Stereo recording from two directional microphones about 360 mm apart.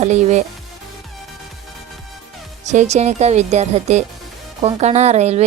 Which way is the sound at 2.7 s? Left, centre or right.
Centre.